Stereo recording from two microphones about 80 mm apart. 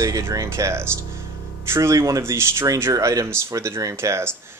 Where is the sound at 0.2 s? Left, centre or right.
Right.